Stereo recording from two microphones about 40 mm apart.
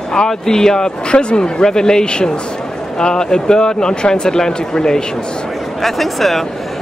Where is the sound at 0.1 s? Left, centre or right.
Centre.